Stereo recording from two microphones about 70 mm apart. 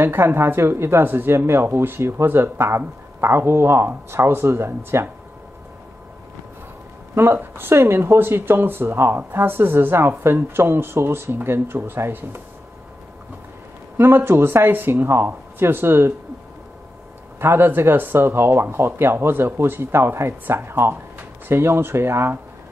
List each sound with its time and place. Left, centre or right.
0.0 s speech: right
7.2 s speech: right
13.9 s speech: right
17.4 s speech: right